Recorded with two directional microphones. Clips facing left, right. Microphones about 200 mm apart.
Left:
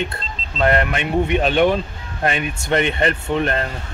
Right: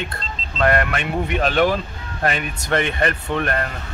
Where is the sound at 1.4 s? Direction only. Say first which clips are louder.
Even; centre (ahead or behind).